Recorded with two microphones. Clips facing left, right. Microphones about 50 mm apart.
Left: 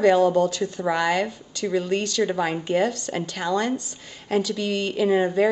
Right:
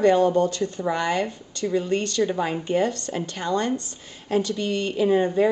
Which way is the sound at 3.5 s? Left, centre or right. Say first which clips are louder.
Even; centre.